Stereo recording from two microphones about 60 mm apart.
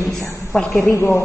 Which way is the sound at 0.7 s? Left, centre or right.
Left.